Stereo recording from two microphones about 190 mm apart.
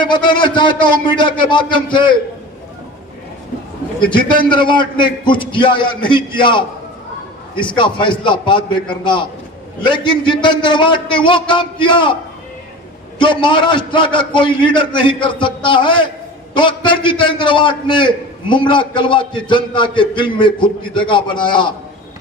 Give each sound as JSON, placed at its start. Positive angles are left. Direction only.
{"t": 0.0, "sound": "a man's voice", "side_deg": 25}
{"t": 4.1, "sound": "a man's voice", "side_deg": 25}
{"t": 7.8, "sound": "a man's voice", "side_deg": 25}
{"t": 13.1, "sound": "a man's voice", "side_deg": 25}